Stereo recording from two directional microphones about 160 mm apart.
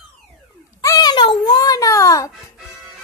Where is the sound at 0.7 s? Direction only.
25° left (ahead or behind).